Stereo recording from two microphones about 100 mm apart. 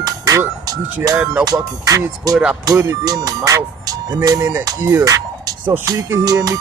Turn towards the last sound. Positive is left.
turn(degrees=-35)  # may be behind; listen again after turning